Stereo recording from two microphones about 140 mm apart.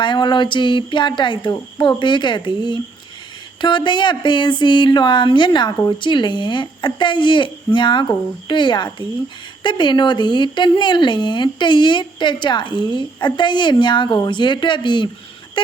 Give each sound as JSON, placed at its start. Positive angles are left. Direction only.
{"t": 0.0, "sound": "speech", "side_deg": 35}